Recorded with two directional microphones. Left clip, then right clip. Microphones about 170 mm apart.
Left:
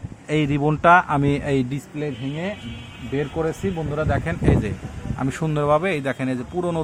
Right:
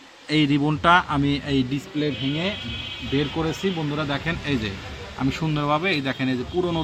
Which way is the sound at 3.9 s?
35° left (ahead or behind).